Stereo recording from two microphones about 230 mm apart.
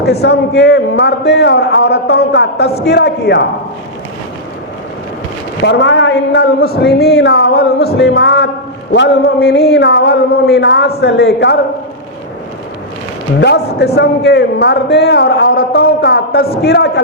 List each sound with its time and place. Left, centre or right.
0.0 s a man's voice: left
5.6 s a man's voice: left
13.4 s a man's voice: left